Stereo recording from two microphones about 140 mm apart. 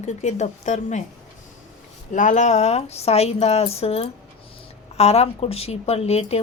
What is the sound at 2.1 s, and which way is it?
A woman's voice, 60° left (ahead or behind).